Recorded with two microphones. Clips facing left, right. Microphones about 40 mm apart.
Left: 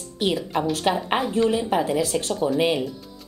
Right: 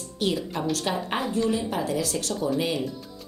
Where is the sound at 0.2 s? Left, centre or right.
Left.